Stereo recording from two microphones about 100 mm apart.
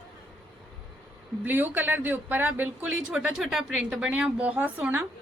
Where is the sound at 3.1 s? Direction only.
5° right (ahead or behind).